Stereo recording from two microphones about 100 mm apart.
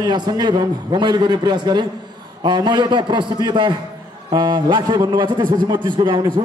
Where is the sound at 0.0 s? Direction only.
45° right (ahead or behind).